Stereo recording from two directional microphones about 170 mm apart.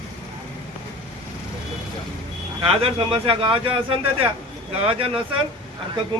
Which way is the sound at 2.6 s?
35° right (ahead or behind).